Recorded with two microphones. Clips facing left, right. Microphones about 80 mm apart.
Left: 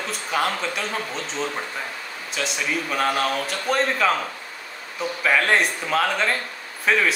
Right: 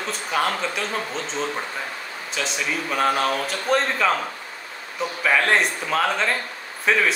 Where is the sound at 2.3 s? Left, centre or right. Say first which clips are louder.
Left 1 dB; centre.